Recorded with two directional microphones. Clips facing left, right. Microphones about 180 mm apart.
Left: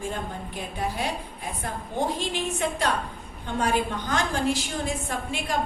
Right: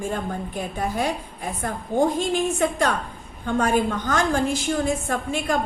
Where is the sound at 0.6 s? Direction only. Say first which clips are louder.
Right 3 dB; 50° right (ahead or behind).